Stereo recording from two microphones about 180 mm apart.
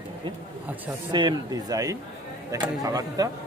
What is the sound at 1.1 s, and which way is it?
Speech, 25° right (ahead or behind).